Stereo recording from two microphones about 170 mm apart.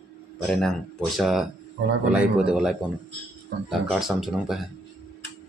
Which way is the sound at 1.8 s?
80° right.